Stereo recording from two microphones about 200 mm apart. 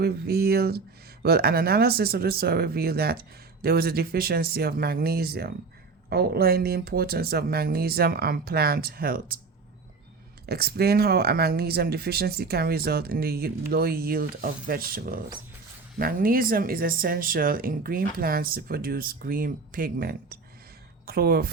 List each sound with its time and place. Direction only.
0.0 s speech: 50° right (ahead or behind)
10.4 s speech: 50° right (ahead or behind)